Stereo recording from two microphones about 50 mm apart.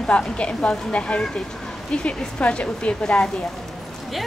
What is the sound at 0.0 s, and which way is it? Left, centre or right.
A woman's voice, left.